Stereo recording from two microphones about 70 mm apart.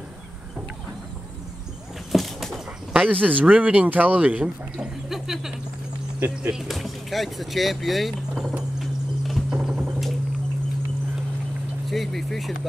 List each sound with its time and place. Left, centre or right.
2.1 s bird flight: centre
2.9 s speech: centre
5.1 s a sound: centre
6.1 s speech: right
6.5 s speech: centre
9.5 s a sound: centre
11.9 s speech: centre